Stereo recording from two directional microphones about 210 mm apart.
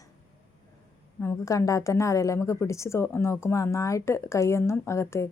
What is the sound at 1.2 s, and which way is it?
A woman's voice, 15° left (ahead or behind).